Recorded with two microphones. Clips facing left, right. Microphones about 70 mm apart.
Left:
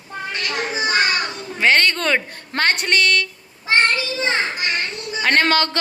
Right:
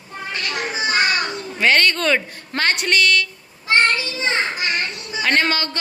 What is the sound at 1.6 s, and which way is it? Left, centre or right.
A woman's voice, left.